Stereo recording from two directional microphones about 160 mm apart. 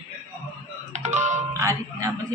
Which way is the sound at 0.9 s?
45° right (ahead or behind).